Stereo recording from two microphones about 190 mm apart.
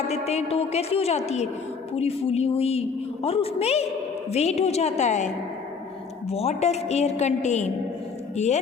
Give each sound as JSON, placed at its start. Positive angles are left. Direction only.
{"t": 0.1, "sound": "a woman's voice", "side_deg": 35}